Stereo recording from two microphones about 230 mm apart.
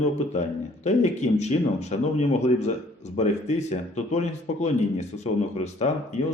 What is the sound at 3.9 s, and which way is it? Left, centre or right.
A man's voice, left.